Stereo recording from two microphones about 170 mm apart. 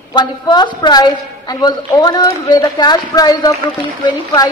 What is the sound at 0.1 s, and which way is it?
A woman's voice, 25° left (ahead or behind).